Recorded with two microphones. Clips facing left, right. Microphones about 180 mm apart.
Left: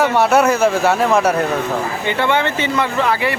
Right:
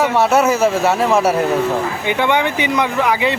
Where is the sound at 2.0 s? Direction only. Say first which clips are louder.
Even; 15° right (ahead or behind).